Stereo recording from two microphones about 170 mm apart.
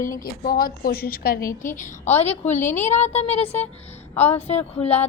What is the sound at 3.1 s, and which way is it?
Speech, 40° left (ahead or behind).